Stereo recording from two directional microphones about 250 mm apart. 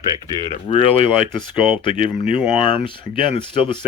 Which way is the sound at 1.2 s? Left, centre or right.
Centre.